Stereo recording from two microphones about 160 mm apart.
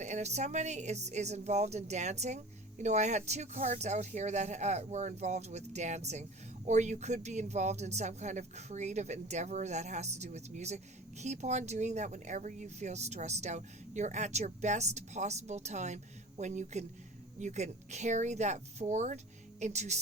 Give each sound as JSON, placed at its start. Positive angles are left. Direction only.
{"t": 0.0, "sound": "speech", "side_deg": -45}